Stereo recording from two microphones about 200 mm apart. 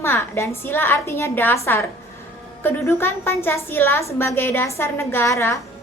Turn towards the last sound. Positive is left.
turn(degrees=15)  # may be behind; listen again after turning